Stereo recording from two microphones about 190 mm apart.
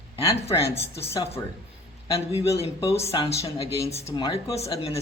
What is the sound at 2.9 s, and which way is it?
Speech, 30° left (ahead or behind).